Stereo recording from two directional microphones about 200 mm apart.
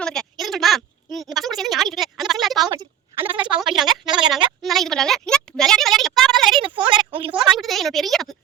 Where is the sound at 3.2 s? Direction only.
25° right (ahead or behind).